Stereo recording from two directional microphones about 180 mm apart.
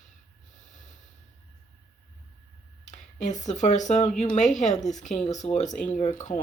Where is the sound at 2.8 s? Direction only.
40° left (ahead or behind).